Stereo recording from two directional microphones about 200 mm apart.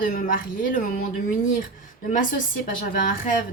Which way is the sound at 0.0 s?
40° left (ahead or behind).